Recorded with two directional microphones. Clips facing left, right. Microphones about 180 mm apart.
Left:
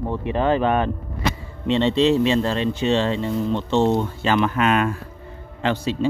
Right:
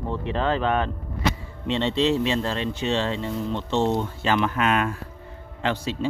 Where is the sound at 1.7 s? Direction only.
90° left.